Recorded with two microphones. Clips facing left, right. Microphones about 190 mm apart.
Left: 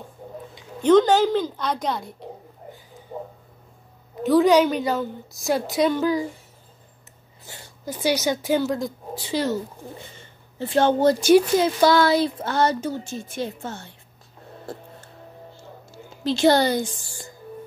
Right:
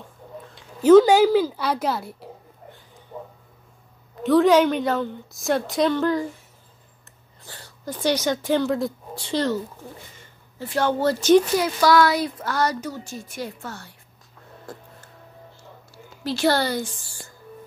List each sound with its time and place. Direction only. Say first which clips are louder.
0.6 s speech: right 4 dB; 5° right (ahead or behind)
4.2 s a woman's voice: even; centre (ahead or behind)
7.4 s speech: even; 15° left (ahead or behind)
10.1 s speech: left 4 dB; 25° left (ahead or behind)
11.5 s speech: left 1 dB; 25° left (ahead or behind)
15.9 s speech: left 3 dB; 20° left (ahead or behind)